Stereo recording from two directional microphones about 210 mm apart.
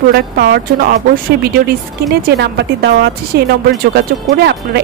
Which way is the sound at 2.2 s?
50° right (ahead or behind).